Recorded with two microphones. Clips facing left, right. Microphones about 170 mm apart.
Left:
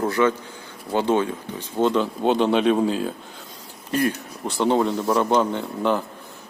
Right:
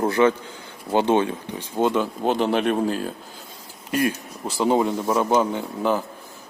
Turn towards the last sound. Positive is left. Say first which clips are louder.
# even
turn(degrees=-5)  # may be behind; listen again after turning